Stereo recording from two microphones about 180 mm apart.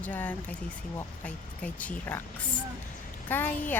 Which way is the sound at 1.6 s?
10° left (ahead or behind).